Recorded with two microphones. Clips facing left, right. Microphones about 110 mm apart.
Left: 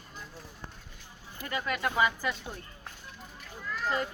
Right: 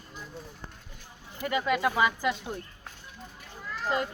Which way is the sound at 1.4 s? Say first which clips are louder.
Right 6 dB; 15° right (ahead or behind).